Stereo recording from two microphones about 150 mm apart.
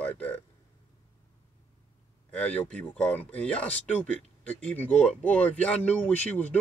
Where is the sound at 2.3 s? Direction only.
10° left (ahead or behind).